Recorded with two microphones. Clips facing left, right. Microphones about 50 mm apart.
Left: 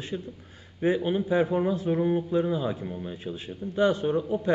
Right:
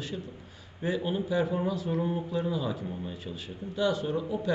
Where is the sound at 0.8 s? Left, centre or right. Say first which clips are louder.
Left 5 dB; left.